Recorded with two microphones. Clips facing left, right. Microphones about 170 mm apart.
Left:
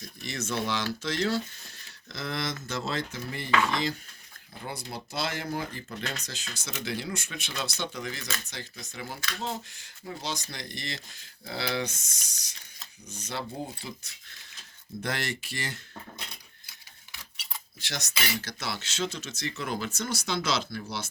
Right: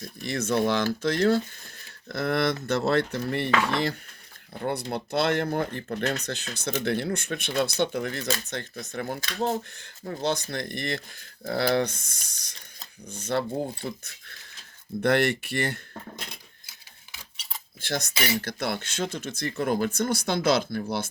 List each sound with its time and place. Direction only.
0.0 s speech: 55° right (ahead or behind)
17.7 s speech: 50° right (ahead or behind)